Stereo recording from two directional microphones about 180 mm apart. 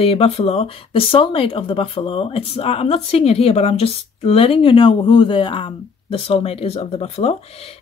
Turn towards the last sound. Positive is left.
turn(degrees=35)  # may be behind; listen again after turning